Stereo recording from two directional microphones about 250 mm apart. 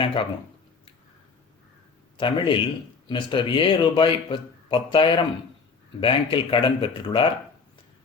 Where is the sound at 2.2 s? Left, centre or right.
Centre.